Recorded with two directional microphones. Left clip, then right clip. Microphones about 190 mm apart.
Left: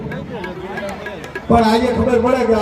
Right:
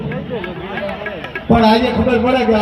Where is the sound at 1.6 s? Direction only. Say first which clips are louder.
Right 2 dB; 50° left (ahead or behind).